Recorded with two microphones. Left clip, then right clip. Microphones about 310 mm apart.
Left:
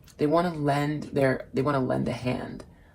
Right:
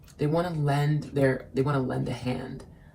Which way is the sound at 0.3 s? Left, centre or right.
Left.